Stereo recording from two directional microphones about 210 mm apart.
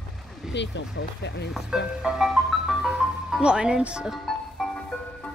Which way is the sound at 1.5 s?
5° right (ahead or behind).